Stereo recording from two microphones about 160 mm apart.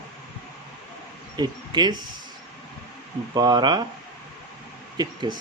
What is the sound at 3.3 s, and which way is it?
Speech, 25° right (ahead or behind).